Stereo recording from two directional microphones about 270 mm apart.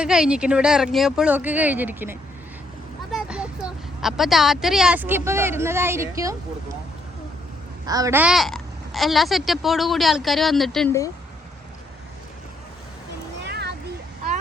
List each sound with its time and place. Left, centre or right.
0.0 s a child's voice: centre
7.9 s a child's voice: centre
13.4 s a sound: right